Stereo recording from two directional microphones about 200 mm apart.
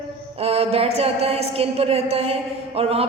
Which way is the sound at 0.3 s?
30° right (ahead or behind).